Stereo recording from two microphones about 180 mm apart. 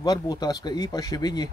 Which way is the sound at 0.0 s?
20° left (ahead or behind).